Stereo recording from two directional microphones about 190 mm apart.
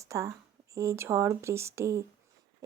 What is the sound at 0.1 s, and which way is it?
A woman's voice, 15° right (ahead or behind).